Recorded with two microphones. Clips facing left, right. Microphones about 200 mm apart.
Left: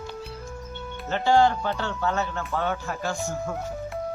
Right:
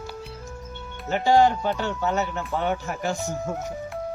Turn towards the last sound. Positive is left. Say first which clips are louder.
# right 2 dB
turn(degrees=-20)  # may be behind; listen again after turning